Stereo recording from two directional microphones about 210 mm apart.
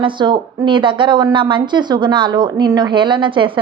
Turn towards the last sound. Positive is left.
turn(degrees=-25)  # may be behind; listen again after turning